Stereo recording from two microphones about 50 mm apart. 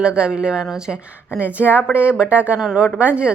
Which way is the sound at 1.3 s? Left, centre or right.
Right.